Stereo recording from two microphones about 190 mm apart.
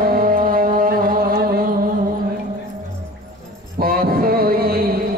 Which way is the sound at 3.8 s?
50° right (ahead or behind).